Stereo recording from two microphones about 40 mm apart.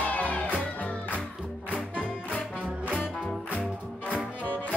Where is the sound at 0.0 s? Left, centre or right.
Left.